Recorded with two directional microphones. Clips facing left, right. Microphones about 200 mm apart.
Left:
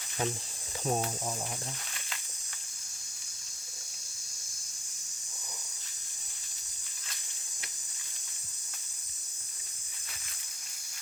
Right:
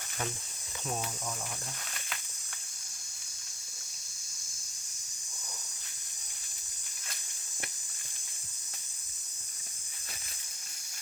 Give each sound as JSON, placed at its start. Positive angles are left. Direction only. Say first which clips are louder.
{"t": 0.9, "sound": "cricket", "louder": "left 6 dB", "side_deg": 40}